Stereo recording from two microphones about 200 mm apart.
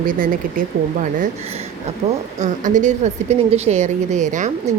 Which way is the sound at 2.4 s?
40° right (ahead or behind).